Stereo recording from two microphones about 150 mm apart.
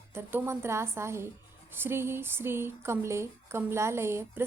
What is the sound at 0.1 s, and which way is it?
A woman's voice, 15° right (ahead or behind).